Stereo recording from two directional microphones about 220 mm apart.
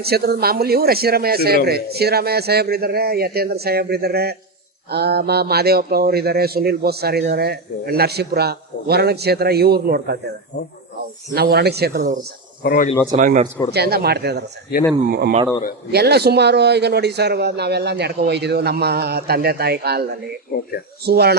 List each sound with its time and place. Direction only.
0.0 s speech: 45° right (ahead or behind)
11.3 s speech: 45° right (ahead or behind)
12.6 s speech: 40° left (ahead or behind)
13.1 s speech: 35° right (ahead or behind)
13.7 s speech: 45° right (ahead or behind)
20.5 s speech: 45° left (ahead or behind)
21.0 s speech: 45° right (ahead or behind)